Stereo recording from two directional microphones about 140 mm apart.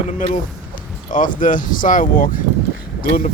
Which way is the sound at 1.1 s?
75° left (ahead or behind).